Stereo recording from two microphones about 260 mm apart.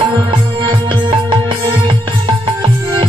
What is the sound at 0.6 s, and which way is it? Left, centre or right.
Music, centre.